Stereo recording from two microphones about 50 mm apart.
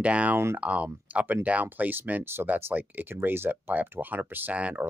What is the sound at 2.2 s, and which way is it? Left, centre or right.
Speech, right.